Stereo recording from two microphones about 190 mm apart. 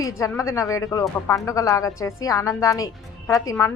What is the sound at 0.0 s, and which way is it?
A woman's voice, 15° left (ahead or behind).